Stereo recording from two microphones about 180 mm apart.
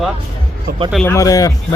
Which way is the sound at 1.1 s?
20° left (ahead or behind).